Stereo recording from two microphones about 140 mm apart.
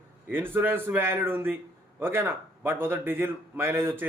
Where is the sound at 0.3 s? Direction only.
15° right (ahead or behind).